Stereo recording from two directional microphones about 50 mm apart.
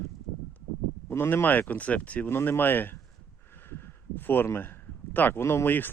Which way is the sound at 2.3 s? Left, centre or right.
Left.